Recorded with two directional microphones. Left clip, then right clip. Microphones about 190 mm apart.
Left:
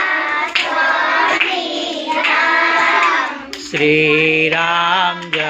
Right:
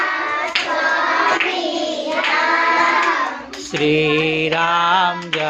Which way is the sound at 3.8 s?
5° right (ahead or behind).